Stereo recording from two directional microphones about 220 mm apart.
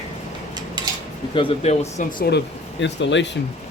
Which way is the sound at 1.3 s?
25° left (ahead or behind).